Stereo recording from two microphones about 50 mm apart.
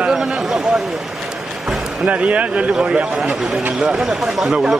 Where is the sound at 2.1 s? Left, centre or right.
Right.